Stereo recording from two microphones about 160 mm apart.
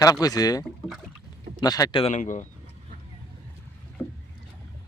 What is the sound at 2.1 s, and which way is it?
Speech, 50° left (ahead or behind).